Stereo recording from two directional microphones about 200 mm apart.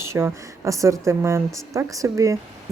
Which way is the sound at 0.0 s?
10° right (ahead or behind).